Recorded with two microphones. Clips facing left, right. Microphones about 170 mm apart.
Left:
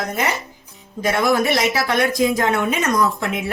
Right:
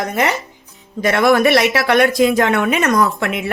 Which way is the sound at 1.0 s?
70° right (ahead or behind).